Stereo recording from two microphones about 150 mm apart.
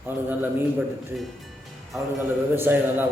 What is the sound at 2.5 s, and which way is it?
Speech, 15° right (ahead or behind).